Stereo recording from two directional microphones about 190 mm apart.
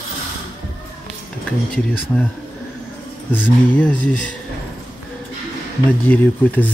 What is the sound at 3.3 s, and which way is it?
Speech, 5° left (ahead or behind).